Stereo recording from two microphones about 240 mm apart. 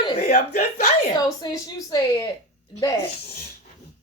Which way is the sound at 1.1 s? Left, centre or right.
Centre.